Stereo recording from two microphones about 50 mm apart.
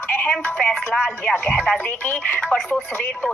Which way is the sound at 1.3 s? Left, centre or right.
Left.